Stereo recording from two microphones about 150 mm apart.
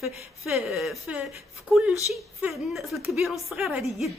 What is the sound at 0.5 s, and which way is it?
A woman's voice, centre (ahead or behind).